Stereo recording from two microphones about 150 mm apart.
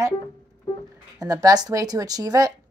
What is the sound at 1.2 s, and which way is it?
A woman's voice, 25° right (ahead or behind).